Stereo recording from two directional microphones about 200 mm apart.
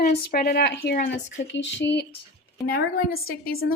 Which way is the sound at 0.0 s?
50° left (ahead or behind).